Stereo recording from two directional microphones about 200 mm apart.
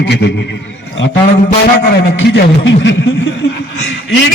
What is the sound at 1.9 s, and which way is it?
A man's voice, 60° left (ahead or behind).